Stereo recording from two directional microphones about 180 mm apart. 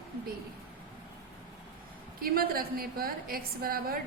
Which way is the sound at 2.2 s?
55° right (ahead or behind).